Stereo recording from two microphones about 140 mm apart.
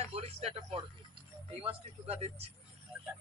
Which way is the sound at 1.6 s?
45° right (ahead or behind).